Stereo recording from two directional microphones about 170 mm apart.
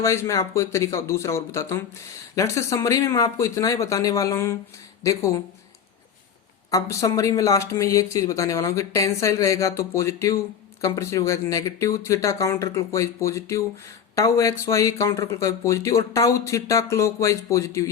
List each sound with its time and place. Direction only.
0.0 s speech: 15° left (ahead or behind)
6.7 s speech: 20° left (ahead or behind)